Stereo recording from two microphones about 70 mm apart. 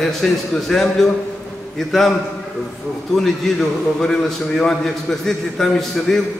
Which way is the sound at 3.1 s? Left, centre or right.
Centre.